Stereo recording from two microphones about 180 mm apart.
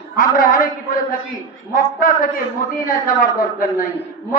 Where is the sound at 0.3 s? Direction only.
50° left (ahead or behind).